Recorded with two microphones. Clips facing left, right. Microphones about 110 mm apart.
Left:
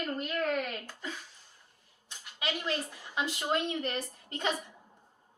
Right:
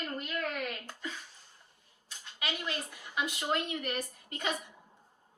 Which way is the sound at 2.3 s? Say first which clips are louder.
Left 3 dB; 30° left (ahead or behind).